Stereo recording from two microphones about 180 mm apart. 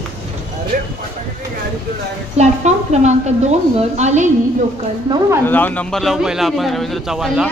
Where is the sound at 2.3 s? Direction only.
40° right (ahead or behind).